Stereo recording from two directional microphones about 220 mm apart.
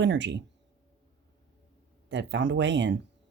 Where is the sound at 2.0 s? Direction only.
55° right (ahead or behind).